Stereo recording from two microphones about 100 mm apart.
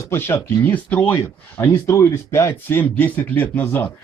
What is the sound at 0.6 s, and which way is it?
Speech, 15° left (ahead or behind).